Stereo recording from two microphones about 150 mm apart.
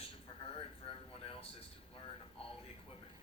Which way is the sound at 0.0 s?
40° left (ahead or behind).